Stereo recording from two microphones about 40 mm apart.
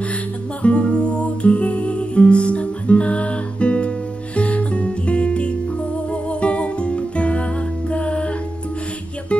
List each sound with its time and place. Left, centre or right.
0.6 s music: left